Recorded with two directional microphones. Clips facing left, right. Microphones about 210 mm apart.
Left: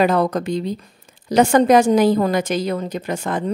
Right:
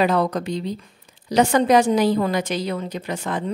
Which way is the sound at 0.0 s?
45° left (ahead or behind).